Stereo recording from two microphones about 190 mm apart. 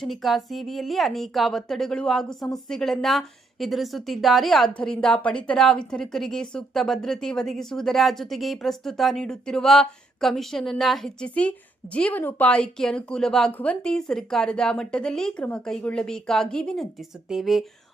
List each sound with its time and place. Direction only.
0.0 s a woman's voice: centre (ahead or behind)